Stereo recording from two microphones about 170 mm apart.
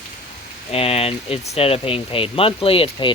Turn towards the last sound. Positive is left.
turn(degrees=35)  # may be behind; listen again after turning